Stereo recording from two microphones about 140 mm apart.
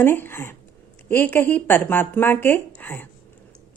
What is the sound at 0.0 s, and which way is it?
Speech, 15° left (ahead or behind).